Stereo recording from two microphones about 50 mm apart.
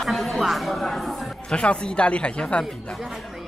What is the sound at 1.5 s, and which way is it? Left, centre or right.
Speech, left.